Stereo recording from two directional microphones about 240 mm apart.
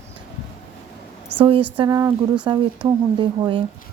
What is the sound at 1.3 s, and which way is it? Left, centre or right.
A woman's voice, centre.